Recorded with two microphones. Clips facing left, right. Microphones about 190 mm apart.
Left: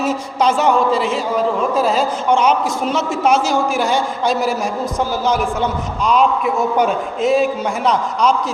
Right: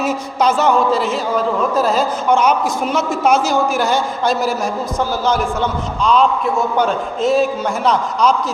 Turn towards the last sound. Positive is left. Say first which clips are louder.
# even
turn(degrees=-35)  # may be behind; listen again after turning